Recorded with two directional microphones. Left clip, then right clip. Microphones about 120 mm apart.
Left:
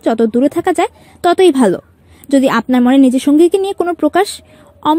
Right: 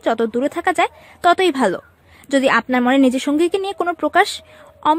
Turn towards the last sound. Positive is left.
turn(degrees=30)  # may be behind; listen again after turning